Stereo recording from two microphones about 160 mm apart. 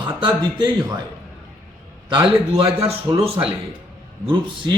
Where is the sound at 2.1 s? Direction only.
35° right (ahead or behind).